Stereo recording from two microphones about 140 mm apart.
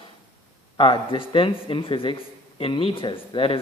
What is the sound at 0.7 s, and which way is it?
Speech, 40° left (ahead or behind).